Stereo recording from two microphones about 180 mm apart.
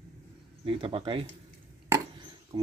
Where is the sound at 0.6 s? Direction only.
30° right (ahead or behind).